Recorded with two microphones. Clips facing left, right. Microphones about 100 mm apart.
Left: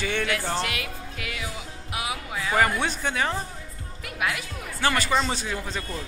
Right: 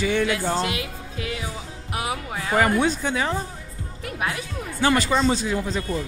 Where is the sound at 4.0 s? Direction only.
35° right (ahead or behind).